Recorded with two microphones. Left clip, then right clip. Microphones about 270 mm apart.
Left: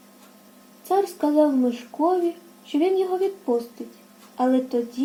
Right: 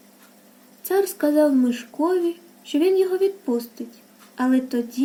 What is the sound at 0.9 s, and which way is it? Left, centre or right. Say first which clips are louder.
Speech: right 1 dB; right.